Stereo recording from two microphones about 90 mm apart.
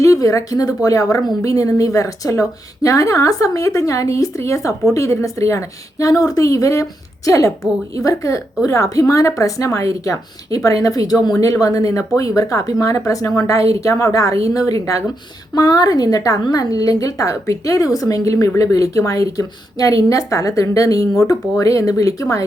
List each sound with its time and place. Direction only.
0.0 s speech: 35° left (ahead or behind)